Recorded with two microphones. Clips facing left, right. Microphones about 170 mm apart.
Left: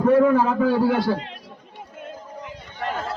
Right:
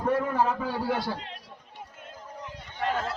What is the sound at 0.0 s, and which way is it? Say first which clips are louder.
A man's voice: left 9 dB; 90° left.